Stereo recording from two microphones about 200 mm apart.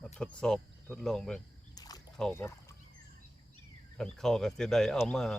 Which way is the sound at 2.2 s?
10° left (ahead or behind).